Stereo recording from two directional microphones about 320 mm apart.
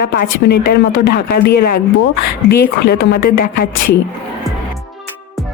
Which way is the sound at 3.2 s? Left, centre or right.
Left.